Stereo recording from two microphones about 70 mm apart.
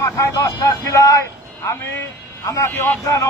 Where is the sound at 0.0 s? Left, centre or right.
Left.